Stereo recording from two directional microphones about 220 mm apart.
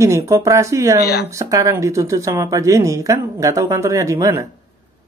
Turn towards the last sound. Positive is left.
turn(degrees=-15)  # may be behind; listen again after turning